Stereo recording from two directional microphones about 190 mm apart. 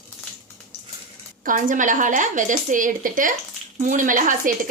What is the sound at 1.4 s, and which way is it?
A woman's voice, 45° right (ahead or behind).